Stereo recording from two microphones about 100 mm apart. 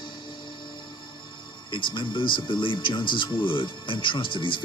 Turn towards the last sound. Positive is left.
turn(degrees=55)  # may be behind; listen again after turning